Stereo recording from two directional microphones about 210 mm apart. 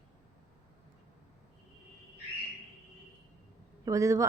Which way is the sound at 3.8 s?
15° right (ahead or behind).